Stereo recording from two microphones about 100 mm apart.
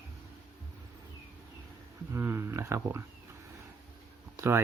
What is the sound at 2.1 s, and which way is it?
Speech, 25° right (ahead or behind).